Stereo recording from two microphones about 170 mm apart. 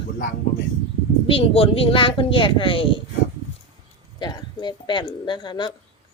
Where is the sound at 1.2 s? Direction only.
35° left (ahead or behind).